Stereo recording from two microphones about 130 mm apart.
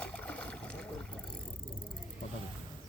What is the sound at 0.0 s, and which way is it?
Water, 10° left (ahead or behind).